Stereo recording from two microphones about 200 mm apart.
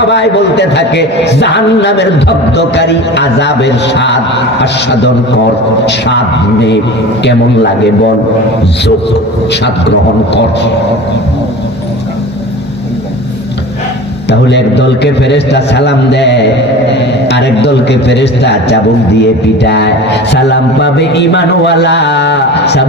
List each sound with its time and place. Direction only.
0.1 s a man's voice: 60° left (ahead or behind)
14.3 s a man's voice: 60° left (ahead or behind)